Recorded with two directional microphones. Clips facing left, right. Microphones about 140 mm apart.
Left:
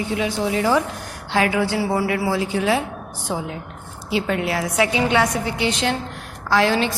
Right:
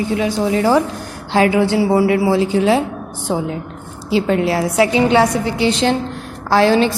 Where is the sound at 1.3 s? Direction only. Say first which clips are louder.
Right 6 dB; 25° right (ahead or behind).